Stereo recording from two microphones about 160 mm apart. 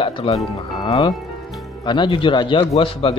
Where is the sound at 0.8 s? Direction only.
25° left (ahead or behind).